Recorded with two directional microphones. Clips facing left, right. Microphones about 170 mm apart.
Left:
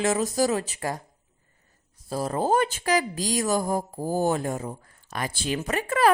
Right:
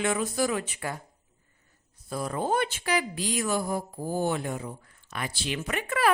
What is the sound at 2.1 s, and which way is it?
A woman's voice, 35° left (ahead or behind).